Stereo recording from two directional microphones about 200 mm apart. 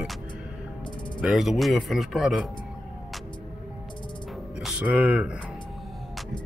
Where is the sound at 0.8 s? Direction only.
25° left (ahead or behind).